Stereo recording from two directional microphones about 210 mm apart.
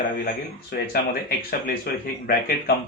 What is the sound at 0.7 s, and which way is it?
Speech, 50° left (ahead or behind).